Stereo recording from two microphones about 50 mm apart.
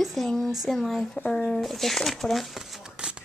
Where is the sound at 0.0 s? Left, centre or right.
Centre.